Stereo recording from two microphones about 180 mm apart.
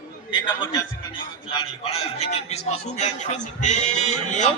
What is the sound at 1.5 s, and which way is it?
A man's voice, 30° left (ahead or behind).